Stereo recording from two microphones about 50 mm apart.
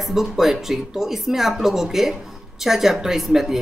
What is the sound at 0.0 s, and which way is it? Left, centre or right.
Speech, centre.